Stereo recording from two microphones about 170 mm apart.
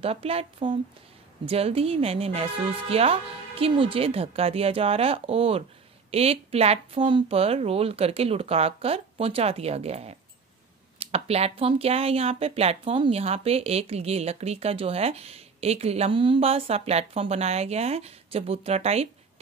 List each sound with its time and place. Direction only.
0.0 s speech: 35° right (ahead or behind)